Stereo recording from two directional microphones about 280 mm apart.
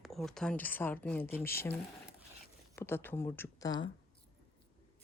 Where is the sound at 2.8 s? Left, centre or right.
Centre.